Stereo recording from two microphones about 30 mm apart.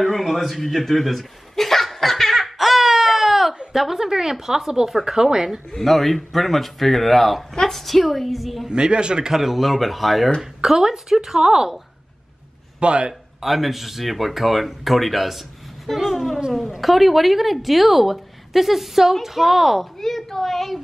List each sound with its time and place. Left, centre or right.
0.0 s chuckle: centre
3.7 s speech: centre
5.8 s a woman's voice: centre
8.6 s speech: right
9.3 s a woman's voice: centre
10.8 s speech: centre
12.8 s speech: right
13.4 s a woman's voice: centre
20.0 s a child's voice: centre